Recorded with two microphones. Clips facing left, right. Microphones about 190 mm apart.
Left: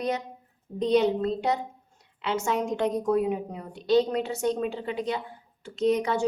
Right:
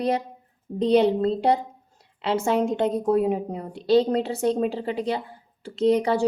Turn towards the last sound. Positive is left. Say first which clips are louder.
# right 4 dB
turn(degrees=-30)  # may be behind; listen again after turning